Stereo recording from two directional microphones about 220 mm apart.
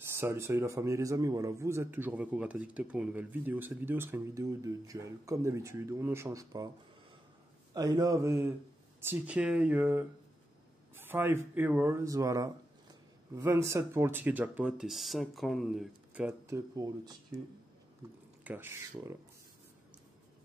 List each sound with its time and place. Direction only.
0.0 s speech: 10° right (ahead or behind)
7.7 s speech: 15° right (ahead or behind)
11.0 s a sound: 10° right (ahead or behind)
11.5 s speech: 10° right (ahead or behind)
18.4 s speech: 10° right (ahead or behind)